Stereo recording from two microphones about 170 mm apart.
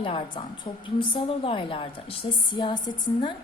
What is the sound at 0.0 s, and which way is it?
A woman's voice, 30° left (ahead or behind).